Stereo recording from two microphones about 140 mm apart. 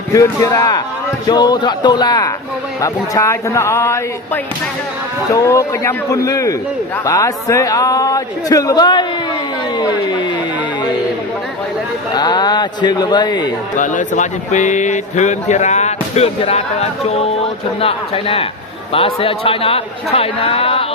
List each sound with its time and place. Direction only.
0.1 s a man's voice: 20° left (ahead or behind)
12.1 s speech: 30° left (ahead or behind)
13.7 s a man's voice: 65° left (ahead or behind); by 20.8 s 40° left (ahead or behind)